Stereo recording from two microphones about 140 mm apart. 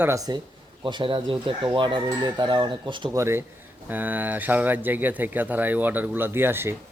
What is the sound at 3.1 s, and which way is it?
Speech, 20° right (ahead or behind).